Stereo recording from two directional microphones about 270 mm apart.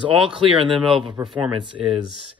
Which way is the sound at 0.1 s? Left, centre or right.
Centre.